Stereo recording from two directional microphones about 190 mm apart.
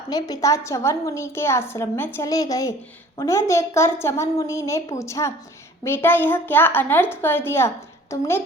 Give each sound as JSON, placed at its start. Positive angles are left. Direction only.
{"t": 0.1, "sound": "a woman's voice", "side_deg": 20}